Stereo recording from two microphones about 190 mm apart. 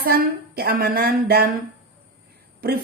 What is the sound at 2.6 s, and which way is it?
Speech, 50° right (ahead or behind).